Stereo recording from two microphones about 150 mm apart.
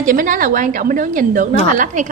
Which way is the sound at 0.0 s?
60° right (ahead or behind).